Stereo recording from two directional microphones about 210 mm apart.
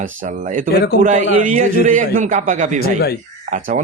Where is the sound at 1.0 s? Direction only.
35° right (ahead or behind).